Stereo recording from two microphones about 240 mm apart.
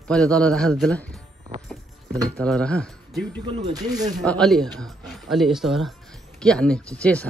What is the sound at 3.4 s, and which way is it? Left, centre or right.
Speech, right.